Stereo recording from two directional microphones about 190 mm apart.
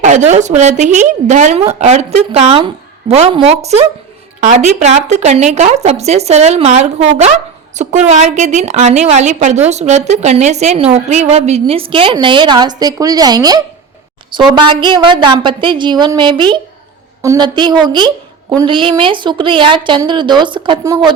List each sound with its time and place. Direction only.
0.0 s a woman's voice: 40° right (ahead or behind); by 21.1 s 20° right (ahead or behind)